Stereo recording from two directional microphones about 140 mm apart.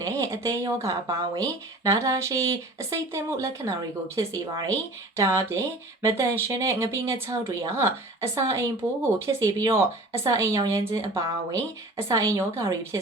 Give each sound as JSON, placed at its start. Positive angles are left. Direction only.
{"t": 0.0, "sound": "speech", "side_deg": -25}